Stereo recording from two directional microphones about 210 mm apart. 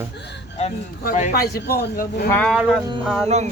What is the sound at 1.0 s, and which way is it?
Speech, 40° left (ahead or behind).